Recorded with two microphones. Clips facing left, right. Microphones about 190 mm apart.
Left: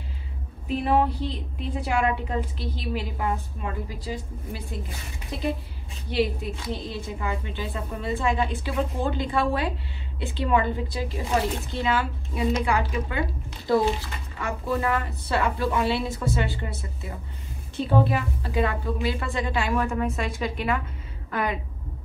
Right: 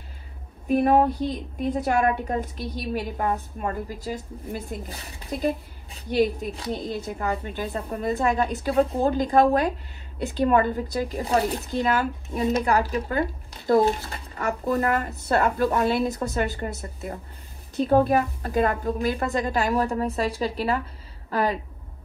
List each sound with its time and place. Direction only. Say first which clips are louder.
0.7 s a woman's voice: right 4 dB; 50° right (ahead or behind)
6.0 s a woman's voice: right 3 dB; 45° right (ahead or behind)
6.7 s a woman's voice: right 4 dB; 50° right (ahead or behind)
17.7 s a woman's voice: right 4 dB; 45° right (ahead or behind)